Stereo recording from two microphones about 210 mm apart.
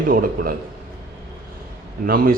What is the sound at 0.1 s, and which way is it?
Speech, 45° right (ahead or behind).